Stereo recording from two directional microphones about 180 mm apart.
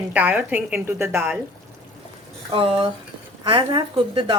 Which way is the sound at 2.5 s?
30° right (ahead or behind).